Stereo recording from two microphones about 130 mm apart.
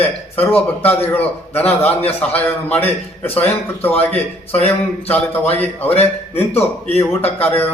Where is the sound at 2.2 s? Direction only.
10° left (ahead or behind).